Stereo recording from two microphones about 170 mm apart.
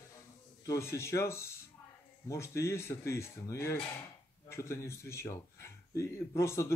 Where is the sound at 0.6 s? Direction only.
15° left (ahead or behind).